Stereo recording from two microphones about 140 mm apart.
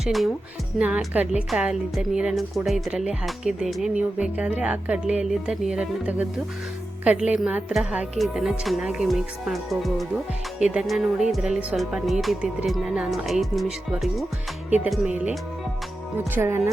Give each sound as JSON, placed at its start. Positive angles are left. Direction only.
{"t": 0.0, "sound": "speech", "side_deg": 0}
{"t": 0.8, "sound": "a woman's voice", "side_deg": -10}